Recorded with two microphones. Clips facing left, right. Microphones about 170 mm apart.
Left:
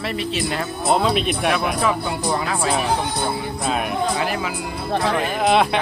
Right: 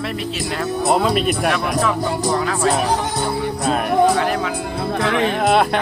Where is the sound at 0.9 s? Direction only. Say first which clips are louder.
Right 1 dB; centre (ahead or behind).